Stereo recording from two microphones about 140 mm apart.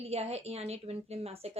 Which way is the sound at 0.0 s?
45° right (ahead or behind).